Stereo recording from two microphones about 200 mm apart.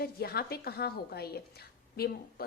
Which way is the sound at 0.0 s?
50° left (ahead or behind).